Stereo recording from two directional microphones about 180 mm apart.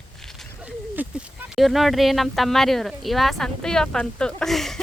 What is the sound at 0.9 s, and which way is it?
Speech, 10° right (ahead or behind).